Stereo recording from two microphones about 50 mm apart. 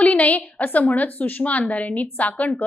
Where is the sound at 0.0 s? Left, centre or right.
Left.